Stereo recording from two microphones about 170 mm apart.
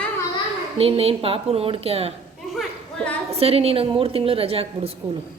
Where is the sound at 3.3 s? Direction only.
35° right (ahead or behind).